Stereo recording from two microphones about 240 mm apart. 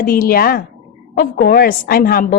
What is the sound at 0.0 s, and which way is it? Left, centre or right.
A woman's voice, left.